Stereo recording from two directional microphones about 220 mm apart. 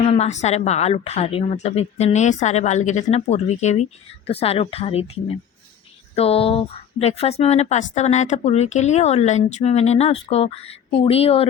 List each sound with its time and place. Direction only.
0.0 s speech: 30° left (ahead or behind)